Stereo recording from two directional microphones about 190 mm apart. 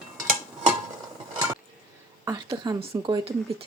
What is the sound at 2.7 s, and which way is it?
Speech, 30° right (ahead or behind).